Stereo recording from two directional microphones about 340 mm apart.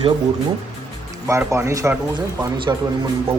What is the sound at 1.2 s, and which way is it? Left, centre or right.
Speech, centre.